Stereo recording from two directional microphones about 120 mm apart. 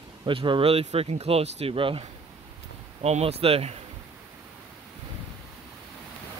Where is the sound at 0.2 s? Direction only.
45° right (ahead or behind).